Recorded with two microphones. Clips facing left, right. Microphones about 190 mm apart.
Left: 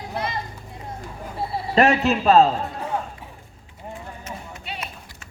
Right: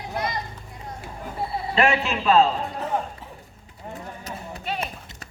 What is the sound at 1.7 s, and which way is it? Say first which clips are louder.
Speech: left 5 dB; 40° left (ahead or behind).